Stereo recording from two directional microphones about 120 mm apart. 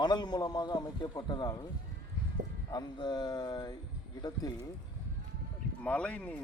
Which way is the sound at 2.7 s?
35° left (ahead or behind).